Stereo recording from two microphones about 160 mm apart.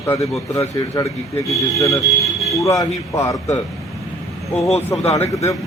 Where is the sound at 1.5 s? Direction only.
20° left (ahead or behind).